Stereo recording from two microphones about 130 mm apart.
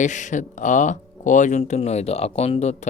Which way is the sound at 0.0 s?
70° left (ahead or behind).